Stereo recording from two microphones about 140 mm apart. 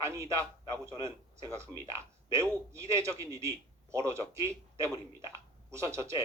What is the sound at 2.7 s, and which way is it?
Speech, 20° right (ahead or behind).